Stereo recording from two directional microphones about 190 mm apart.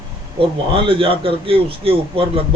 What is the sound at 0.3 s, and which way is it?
A man's voice, 30° right (ahead or behind).